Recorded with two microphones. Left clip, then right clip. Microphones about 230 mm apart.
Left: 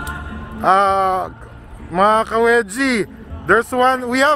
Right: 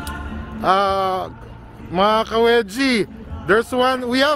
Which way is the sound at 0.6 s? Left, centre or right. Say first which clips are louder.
Left 3 dB; centre.